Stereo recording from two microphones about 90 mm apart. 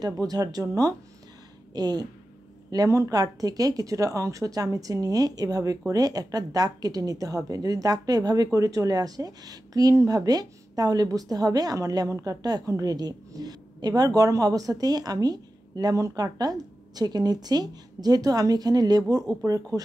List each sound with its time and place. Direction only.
0.0 s speech: 45° right (ahead or behind)